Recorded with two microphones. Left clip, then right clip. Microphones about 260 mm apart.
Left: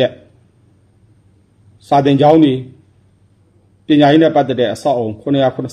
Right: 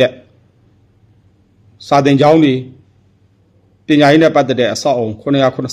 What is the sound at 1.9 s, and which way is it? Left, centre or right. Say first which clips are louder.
Speech: right 1 dB; right.